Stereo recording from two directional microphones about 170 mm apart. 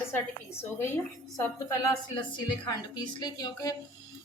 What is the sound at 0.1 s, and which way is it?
Speech, 15° left (ahead or behind).